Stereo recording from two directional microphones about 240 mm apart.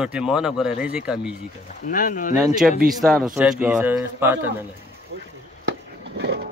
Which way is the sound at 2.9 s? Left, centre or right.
Centre.